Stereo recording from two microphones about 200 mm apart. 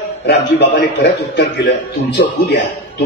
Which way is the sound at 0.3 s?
60° left (ahead or behind).